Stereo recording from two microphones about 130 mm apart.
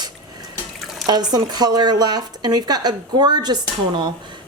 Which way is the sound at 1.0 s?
30° right (ahead or behind).